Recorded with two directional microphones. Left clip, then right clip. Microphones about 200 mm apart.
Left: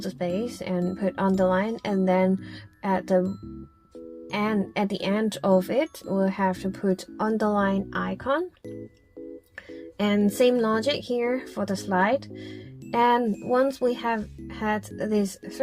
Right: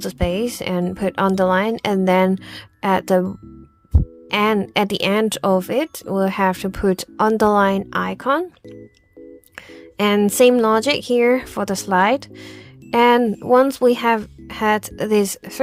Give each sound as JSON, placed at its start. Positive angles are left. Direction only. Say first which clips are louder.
{"t": 0.0, "sound": "speech", "louder": "right 7 dB", "side_deg": -35}
{"t": 4.3, "sound": "speech", "louder": "right 10 dB", "side_deg": -40}
{"t": 10.0, "sound": "speech", "louder": "right 8 dB", "side_deg": -35}